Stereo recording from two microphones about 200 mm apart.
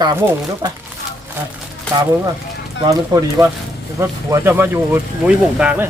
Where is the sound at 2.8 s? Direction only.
15° right (ahead or behind).